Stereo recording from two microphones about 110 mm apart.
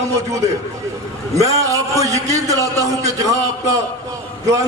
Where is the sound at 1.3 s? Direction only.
30° right (ahead or behind).